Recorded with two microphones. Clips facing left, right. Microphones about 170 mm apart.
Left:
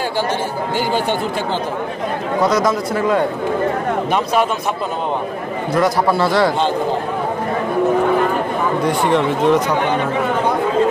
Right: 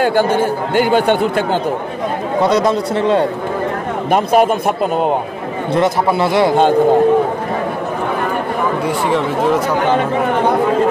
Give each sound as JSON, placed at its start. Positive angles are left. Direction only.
{"t": 0.0, "sound": "speech", "side_deg": -55}
{"t": 2.5, "sound": "speech", "side_deg": -30}
{"t": 4.1, "sound": "a man's voice", "side_deg": -50}
{"t": 5.8, "sound": "speech", "side_deg": -20}
{"t": 8.8, "sound": "speech", "side_deg": -5}